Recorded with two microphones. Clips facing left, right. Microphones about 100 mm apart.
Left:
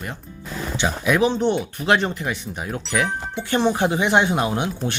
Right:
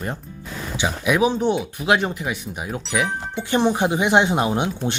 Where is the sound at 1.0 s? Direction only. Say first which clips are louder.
Even; 10° right (ahead or behind).